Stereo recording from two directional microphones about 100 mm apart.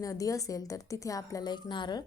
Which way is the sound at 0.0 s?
35° left (ahead or behind).